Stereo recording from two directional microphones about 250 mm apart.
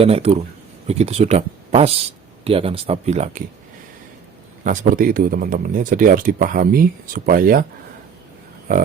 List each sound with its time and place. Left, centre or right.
0.0 s speech: right
4.6 s speech: right